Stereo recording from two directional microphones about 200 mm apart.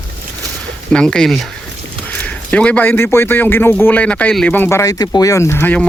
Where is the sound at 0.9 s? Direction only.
5° left (ahead or behind).